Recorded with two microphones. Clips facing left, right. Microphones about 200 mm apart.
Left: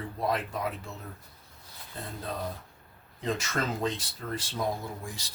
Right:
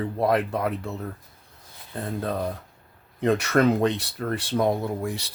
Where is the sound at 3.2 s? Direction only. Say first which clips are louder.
Right 11 dB; 65° right (ahead or behind).